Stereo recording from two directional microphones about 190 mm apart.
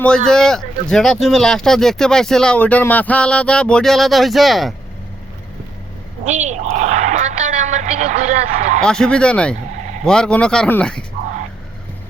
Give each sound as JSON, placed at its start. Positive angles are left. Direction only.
{"t": 0.3, "sound": "speech", "side_deg": 5}
{"t": 6.2, "sound": "a woman's voice", "side_deg": -40}
{"t": 8.8, "sound": "speech", "side_deg": 5}